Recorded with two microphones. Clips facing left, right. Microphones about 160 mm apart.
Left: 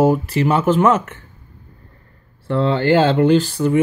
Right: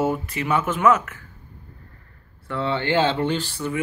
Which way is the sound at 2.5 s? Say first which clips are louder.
Left 7 dB; 40° left (ahead or behind).